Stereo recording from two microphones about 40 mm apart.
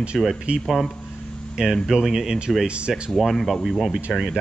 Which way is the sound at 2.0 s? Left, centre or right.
Centre.